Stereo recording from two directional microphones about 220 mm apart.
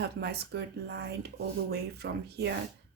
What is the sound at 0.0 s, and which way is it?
Speech, 50° right (ahead or behind).